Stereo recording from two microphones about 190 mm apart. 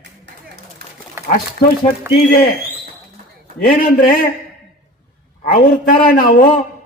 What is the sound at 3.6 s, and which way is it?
Speech, 50° left (ahead or behind).